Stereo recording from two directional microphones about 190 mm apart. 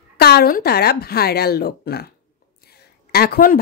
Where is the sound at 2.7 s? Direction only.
55° left (ahead or behind).